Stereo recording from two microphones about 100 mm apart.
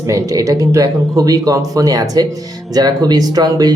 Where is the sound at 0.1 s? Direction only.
35° right (ahead or behind).